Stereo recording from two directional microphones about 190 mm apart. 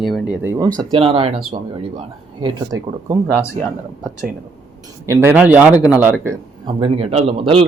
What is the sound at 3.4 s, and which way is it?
Speech, 15° left (ahead or behind).